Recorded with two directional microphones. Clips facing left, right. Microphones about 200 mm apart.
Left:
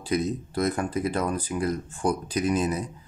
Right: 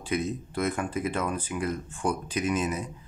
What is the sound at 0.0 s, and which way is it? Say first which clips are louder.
Speech: left 3 dB; 35° left (ahead or behind).